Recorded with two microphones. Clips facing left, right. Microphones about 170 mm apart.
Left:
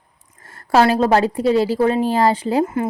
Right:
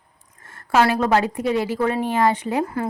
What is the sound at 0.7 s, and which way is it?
Speech, 30° left (ahead or behind).